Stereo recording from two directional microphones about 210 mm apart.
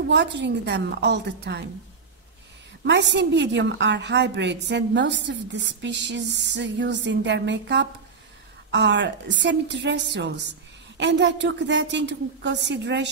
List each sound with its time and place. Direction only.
0.1 s a woman's voice: 55° right (ahead or behind)
2.9 s a woman's voice: 55° right (ahead or behind)